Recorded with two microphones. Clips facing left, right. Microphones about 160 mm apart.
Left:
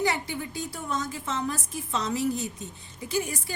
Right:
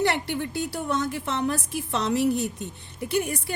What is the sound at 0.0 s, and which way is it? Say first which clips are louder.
A woman's voice: right 3 dB; 70° right (ahead or behind).